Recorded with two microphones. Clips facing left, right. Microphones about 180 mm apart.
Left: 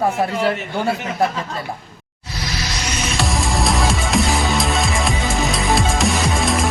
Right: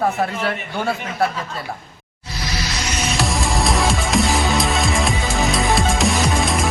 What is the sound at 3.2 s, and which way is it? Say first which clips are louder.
Music: left 1 dB; centre (ahead or behind).